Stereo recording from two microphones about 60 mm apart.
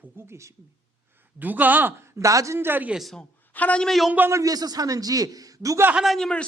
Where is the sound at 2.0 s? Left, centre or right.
Right.